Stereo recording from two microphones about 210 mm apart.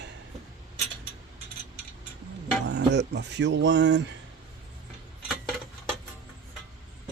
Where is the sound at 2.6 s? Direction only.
55° right (ahead or behind).